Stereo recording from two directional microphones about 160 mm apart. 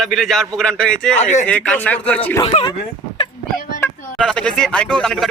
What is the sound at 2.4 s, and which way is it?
Speech, 30° left (ahead or behind).